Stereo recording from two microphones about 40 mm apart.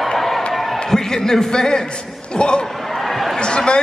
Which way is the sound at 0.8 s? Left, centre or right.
Centre.